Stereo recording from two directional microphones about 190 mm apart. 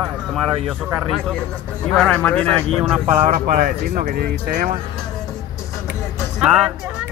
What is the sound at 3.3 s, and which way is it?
Speech, 45° right (ahead or behind).